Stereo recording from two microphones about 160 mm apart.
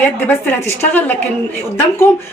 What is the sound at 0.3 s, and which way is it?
Speech, 15° left (ahead or behind).